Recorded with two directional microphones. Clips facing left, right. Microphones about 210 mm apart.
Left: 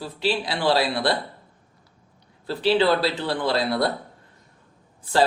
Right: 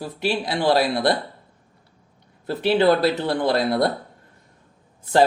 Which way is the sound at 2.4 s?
50° right (ahead or behind).